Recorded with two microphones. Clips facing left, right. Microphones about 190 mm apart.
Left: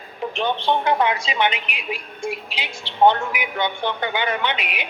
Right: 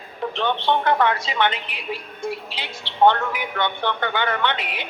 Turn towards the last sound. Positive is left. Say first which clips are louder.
# right 1 dB
turn(degrees=15)  # may be behind; listen again after turning